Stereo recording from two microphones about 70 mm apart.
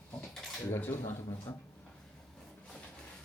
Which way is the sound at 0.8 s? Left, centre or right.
Left.